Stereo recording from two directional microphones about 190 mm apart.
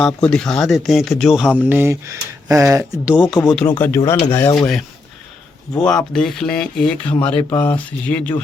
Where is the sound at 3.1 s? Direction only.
5° right (ahead or behind).